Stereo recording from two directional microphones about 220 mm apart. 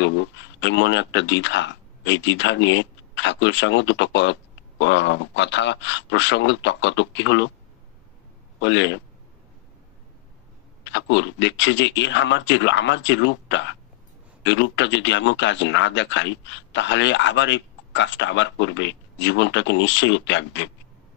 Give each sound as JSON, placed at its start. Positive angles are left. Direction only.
{"t": 0.0, "sound": "a man's voice", "side_deg": 55}
{"t": 8.5, "sound": "a man's voice", "side_deg": 55}
{"t": 10.8, "sound": "a man's voice", "side_deg": 55}